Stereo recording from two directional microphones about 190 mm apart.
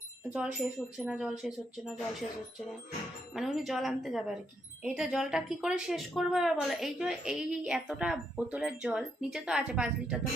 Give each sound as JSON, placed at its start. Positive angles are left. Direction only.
{"t": 0.3, "sound": "speech", "side_deg": -5}
{"t": 3.3, "sound": "speech", "side_deg": 0}